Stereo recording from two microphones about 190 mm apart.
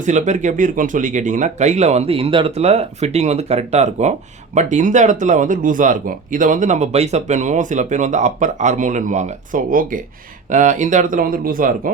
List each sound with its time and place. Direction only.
0.0 s speech: 40° right (ahead or behind)